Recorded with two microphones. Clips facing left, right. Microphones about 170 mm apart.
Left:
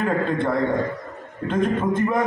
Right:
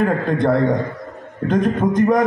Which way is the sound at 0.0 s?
40° right (ahead or behind).